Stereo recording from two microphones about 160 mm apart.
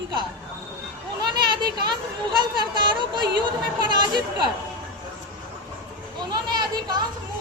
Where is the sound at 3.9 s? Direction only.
30° right (ahead or behind).